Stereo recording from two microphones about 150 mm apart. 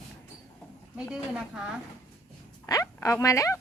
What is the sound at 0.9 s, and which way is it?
Speech, 5° right (ahead or behind).